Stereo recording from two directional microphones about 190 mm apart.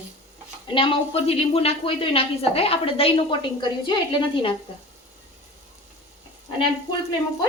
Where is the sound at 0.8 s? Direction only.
30° left (ahead or behind).